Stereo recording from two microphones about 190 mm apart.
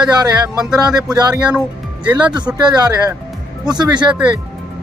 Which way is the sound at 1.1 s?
20° right (ahead or behind).